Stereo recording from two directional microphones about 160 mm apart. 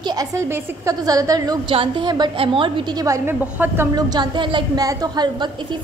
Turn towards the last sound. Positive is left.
turn(degrees=-25)  # may be behind; listen again after turning